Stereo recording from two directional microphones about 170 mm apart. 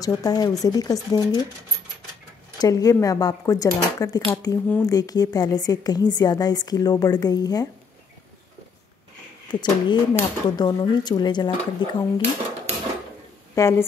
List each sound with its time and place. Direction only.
0.0 s a woman's voice: 20° left (ahead or behind)
2.6 s a woman's voice: 20° left (ahead or behind)
9.5 s a woman's voice: 25° left (ahead or behind)
12.7 s a sound: 40° right (ahead or behind)
13.6 s a woman's voice: 15° left (ahead or behind)